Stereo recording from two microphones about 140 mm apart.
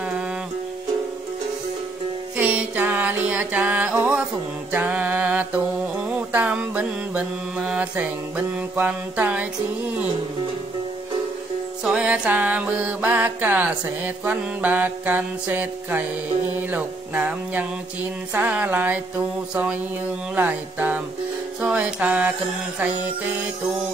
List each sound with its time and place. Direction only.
2.3 s music: 10° right (ahead or behind)
4.7 s mantra: 10° right (ahead or behind)
11.8 s mantra: 5° right (ahead or behind)